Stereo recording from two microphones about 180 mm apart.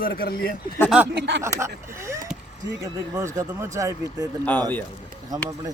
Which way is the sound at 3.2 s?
15° right (ahead or behind).